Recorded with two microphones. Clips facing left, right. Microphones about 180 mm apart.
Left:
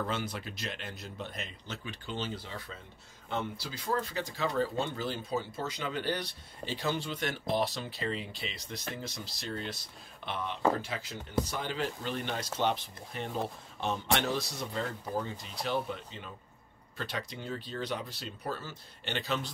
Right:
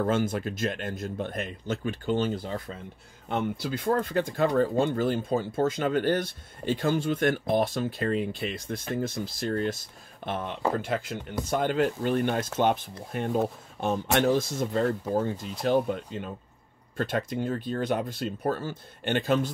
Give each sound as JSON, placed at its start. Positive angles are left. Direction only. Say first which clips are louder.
{"t": 0.0, "sound": "speech", "louder": "right 9 dB", "side_deg": -50}